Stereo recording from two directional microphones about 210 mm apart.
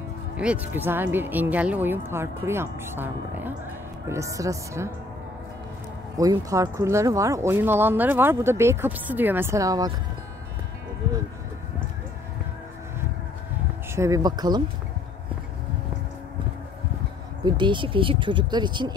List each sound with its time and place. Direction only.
0.4 s speech: 5° right (ahead or behind)
6.1 s speech: 15° right (ahead or behind)
13.9 s speech: 15° right (ahead or behind)
17.5 s speech: 20° right (ahead or behind)